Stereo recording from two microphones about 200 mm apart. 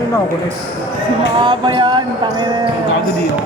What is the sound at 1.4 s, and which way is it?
Music, 25° right (ahead or behind).